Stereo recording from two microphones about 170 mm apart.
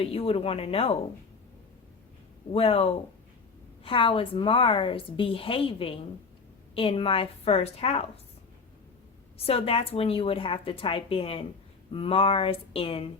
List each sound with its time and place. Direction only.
0.0 s a woman's voice: 35° left (ahead or behind)
2.5 s a woman's voice: 35° left (ahead or behind)
9.5 s a woman's voice: 35° left (ahead or behind)